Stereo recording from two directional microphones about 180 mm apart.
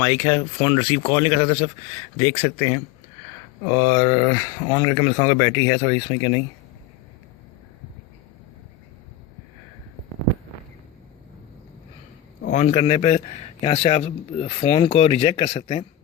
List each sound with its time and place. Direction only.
0.0 s speech: 15° left (ahead or behind)
12.5 s a man's voice: 45° left (ahead or behind)